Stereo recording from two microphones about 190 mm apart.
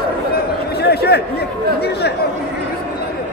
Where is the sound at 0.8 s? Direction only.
60° left (ahead or behind).